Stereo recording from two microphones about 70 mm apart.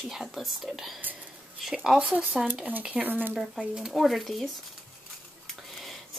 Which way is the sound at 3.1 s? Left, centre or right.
Right.